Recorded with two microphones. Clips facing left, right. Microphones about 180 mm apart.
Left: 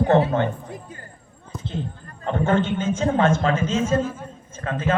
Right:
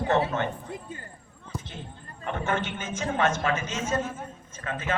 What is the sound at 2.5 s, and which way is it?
A man's voice, 30° left (ahead or behind).